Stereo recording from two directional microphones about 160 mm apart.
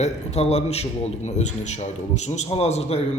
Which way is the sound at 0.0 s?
40° left (ahead or behind).